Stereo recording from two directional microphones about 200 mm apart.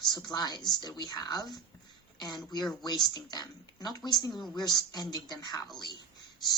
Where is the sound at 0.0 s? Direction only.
20° left (ahead or behind).